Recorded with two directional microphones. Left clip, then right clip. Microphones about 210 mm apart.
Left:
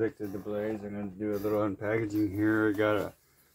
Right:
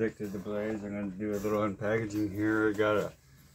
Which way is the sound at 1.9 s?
50° left (ahead or behind).